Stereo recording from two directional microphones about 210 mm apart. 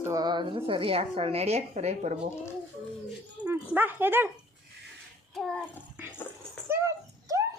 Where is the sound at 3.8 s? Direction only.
10° right (ahead or behind).